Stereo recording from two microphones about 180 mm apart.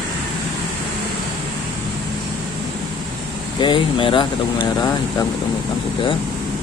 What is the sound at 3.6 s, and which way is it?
Speech, 25° left (ahead or behind).